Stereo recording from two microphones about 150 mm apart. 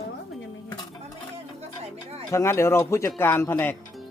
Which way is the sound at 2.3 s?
20° left (ahead or behind).